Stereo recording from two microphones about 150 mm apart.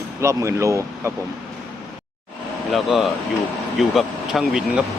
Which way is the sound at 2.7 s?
Centre (ahead or behind).